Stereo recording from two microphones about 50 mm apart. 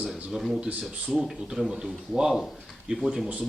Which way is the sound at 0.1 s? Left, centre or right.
Centre.